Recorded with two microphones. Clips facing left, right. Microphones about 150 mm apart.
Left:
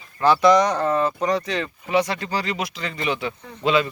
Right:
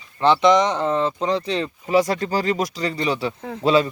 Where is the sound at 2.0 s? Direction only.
45° right (ahead or behind).